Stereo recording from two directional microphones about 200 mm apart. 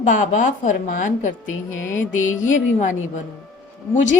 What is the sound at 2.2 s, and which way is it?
Speech, 80° left.